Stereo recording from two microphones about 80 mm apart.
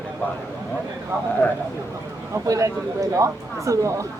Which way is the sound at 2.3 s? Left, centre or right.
Right.